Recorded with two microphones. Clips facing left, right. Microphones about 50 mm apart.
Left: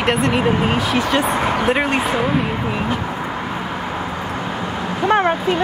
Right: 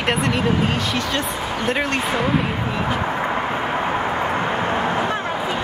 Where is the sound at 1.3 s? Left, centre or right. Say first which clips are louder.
Left 7 dB; left.